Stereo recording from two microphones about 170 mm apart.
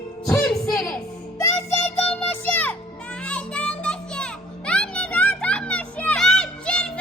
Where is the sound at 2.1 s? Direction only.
10° left (ahead or behind).